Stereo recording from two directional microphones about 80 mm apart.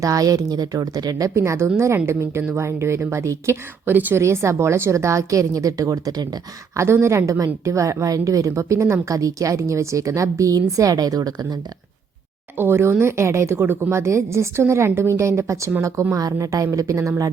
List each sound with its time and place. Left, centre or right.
0.0 s a woman's voice: right
1.3 s speech: right
4.2 s speech: right
6.7 s a woman's voice: right
12.5 s a woman's voice: right